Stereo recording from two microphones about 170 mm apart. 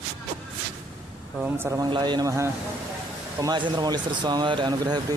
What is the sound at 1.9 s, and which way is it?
Speech, 25° right (ahead or behind).